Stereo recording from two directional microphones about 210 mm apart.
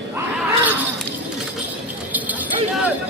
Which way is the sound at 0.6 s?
10° right (ahead or behind).